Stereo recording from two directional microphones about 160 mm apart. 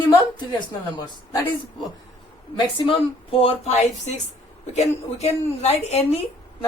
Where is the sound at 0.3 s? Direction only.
25° left (ahead or behind).